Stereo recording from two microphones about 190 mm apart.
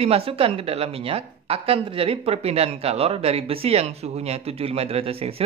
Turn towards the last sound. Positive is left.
turn(degrees=-30)  # may be behind; listen again after turning